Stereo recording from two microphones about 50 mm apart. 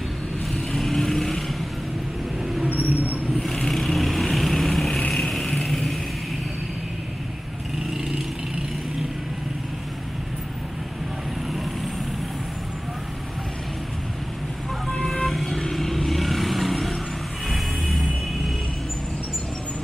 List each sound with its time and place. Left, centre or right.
0.7 s vehicle: centre
2.6 s vehicle: right
3.5 s vehicle: centre
15.2 s vehicle: centre
17.5 s music: centre